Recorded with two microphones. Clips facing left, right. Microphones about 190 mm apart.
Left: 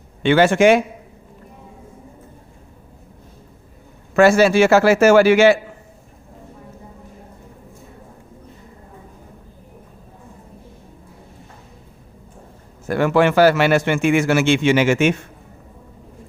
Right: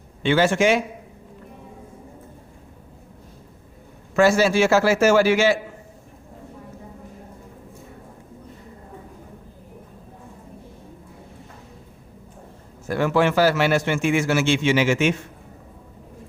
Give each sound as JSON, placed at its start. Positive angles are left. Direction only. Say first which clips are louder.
{"t": 0.2, "sound": "a man's voice", "louder": "left 5 dB", "side_deg": 60}
{"t": 4.1, "sound": "a man's voice", "louder": "left 4 dB", "side_deg": 60}
{"t": 12.9, "sound": "a man's voice", "louder": "left 4 dB", "side_deg": 60}